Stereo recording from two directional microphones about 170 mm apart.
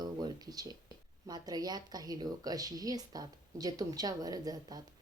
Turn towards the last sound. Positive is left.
turn(degrees=-20)  # may be behind; listen again after turning